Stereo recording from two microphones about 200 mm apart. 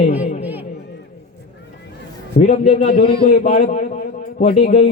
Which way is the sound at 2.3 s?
35° left (ahead or behind).